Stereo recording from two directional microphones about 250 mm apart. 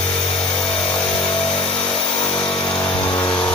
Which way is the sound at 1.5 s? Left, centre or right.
Left.